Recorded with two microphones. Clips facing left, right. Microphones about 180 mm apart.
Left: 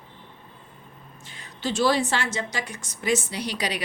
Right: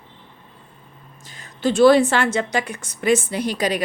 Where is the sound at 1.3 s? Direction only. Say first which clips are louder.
Right 8 dB; 45° right (ahead or behind).